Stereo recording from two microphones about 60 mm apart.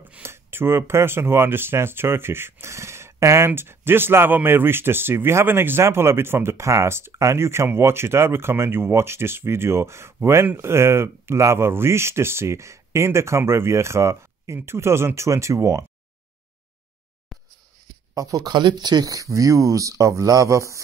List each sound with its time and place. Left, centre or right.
0.2 s speech: right
17.3 s a sound: centre
18.1 s speech: right